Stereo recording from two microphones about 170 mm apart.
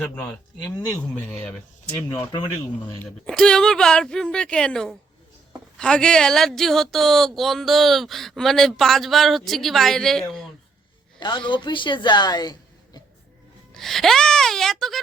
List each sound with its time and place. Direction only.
0.0 s speech: 5° left (ahead or behind)
0.6 s speech: 20° left (ahead or behind)
0.9 s speech: 10° left (ahead or behind)
2.8 s speech: 5° left (ahead or behind)
11.2 s a woman's voice: 30° left (ahead or behind)
13.7 s speech: centre (ahead or behind)